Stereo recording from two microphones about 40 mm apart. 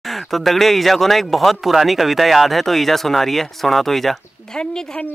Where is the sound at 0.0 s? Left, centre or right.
Centre.